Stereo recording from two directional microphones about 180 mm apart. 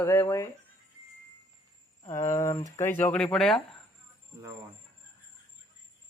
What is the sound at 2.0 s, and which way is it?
Speech, 15° left (ahead or behind).